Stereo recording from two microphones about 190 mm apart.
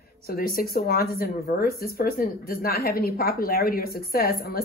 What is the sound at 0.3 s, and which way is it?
Speech, 50° left (ahead or behind).